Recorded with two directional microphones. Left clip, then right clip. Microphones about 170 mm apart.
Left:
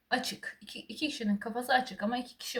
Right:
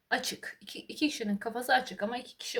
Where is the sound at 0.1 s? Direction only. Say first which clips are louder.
Even; 35° right (ahead or behind).